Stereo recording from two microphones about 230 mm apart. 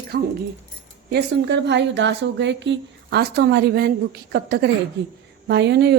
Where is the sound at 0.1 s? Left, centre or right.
Right.